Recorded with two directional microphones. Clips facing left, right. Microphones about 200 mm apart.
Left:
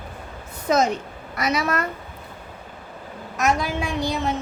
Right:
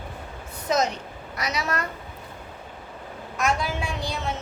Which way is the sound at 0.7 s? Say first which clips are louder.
Left 4 dB; 50° left (ahead or behind).